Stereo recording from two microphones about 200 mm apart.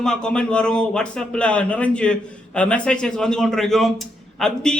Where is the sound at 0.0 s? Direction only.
5° left (ahead or behind).